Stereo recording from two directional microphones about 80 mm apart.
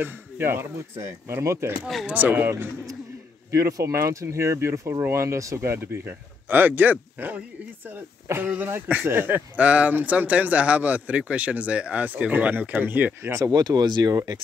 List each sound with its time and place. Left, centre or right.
0.0 s speech: right
2.0 s speech: centre
3.5 s speech: right
13.5 s speech: right